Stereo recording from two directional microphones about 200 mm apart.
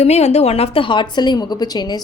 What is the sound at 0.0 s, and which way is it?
A woman's voice, 35° left (ahead or behind).